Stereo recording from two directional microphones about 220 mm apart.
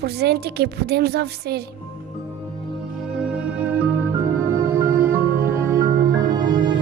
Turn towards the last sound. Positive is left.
turn(degrees=-20)  # may be behind; listen again after turning